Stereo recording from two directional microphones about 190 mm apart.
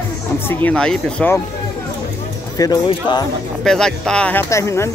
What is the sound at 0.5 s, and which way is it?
Speech, 10° left (ahead or behind).